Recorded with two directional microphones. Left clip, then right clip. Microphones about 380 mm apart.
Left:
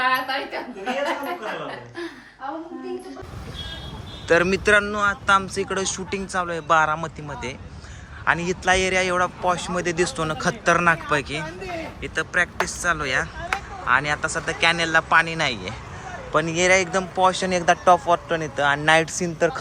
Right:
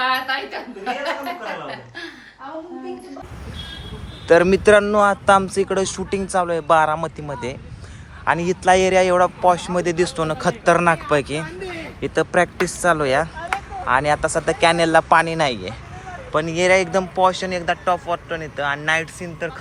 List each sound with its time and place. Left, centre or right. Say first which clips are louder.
4.3 s a man's voice: right 5 dB; centre
13.5 s a sound: right 2 dB; centre
13.8 s a man's voice: right 3 dB; centre